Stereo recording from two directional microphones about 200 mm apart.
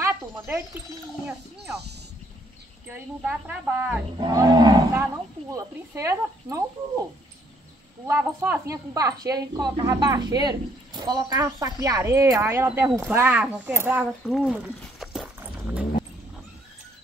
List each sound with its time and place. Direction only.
0.0 s a sound: 15° right (ahead or behind)
2.9 s a woman's voice: 10° right (ahead or behind)
4.2 s a woman's voice: 20° right (ahead or behind)
8.1 s a woman's voice: 10° right (ahead or behind)
14.8 s a sound: centre (ahead or behind)
15.3 s dog: 10° right (ahead or behind)